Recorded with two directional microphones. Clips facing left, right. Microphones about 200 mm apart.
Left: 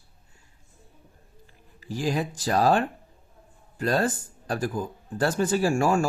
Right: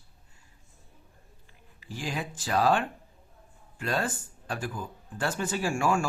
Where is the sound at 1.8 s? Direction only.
40° left (ahead or behind).